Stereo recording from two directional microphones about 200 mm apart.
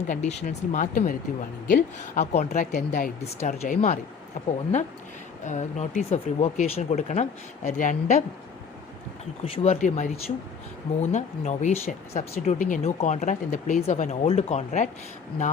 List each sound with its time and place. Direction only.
0.1 s speech: 35° left (ahead or behind)
9.4 s speech: 30° left (ahead or behind)